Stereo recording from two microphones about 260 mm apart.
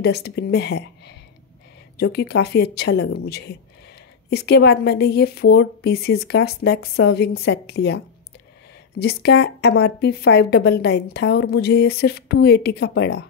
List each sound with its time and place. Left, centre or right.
0.0 s a woman's voice: left
9.0 s a woman's voice: left